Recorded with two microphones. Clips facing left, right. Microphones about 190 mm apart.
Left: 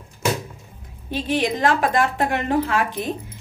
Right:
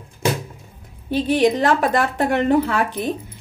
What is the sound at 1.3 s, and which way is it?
Speech, 40° right (ahead or behind).